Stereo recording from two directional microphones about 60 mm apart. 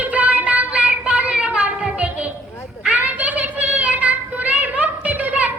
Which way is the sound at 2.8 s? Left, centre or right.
Right.